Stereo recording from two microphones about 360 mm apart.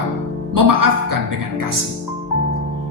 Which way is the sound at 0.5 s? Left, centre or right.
Right.